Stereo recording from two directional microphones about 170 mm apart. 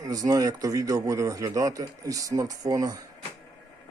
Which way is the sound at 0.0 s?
20° right (ahead or behind).